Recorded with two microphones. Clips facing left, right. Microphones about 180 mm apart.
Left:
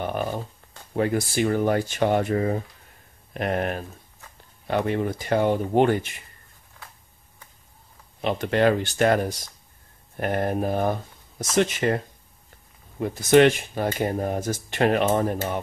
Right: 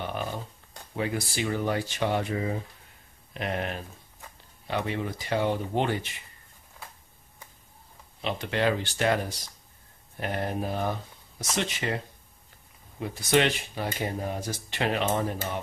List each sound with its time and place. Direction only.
0.0 s a sound: 45° left (ahead or behind)
0.9 s speech: 50° left (ahead or behind)
8.2 s speech: 50° left (ahead or behind)
13.0 s speech: 50° left (ahead or behind)